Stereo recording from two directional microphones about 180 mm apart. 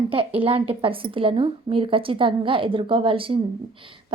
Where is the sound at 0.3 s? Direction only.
30° right (ahead or behind).